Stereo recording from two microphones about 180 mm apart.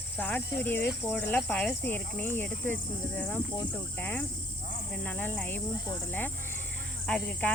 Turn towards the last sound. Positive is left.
turn(degrees=5)  # may be behind; listen again after turning